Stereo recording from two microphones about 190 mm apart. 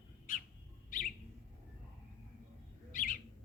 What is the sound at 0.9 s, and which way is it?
Bird, 45° left (ahead or behind).